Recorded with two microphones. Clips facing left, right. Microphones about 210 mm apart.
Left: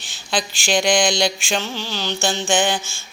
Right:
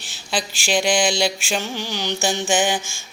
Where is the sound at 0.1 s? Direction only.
5° right (ahead or behind).